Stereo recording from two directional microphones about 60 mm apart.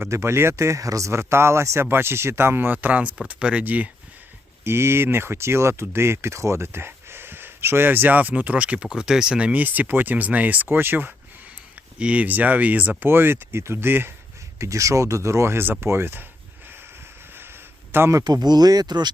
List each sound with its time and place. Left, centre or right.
0.1 s speech: right
4.6 s speech: right; by 9.5 s centre
9.5 s speech: right
10.7 s speech: right
11.9 s speech: right
13.1 s speech: right
14.6 s speech: right
18.1 s speech: right